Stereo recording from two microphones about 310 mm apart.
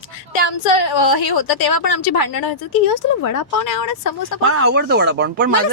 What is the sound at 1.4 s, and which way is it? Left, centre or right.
Speech, left.